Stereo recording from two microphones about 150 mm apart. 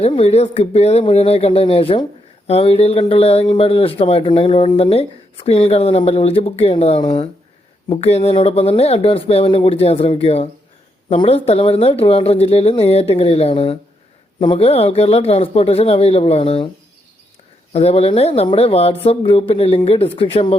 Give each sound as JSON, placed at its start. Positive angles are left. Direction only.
{"t": 0.1, "sound": "a man's voice", "side_deg": 40}
{"t": 17.7, "sound": "a man's voice", "side_deg": 40}